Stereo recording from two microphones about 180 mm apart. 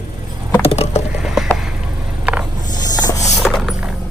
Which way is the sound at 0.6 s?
35° left (ahead or behind).